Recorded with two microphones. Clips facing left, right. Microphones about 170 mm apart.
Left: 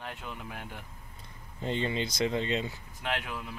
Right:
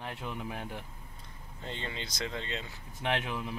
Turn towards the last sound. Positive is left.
turn(degrees=-20)  # may be behind; listen again after turning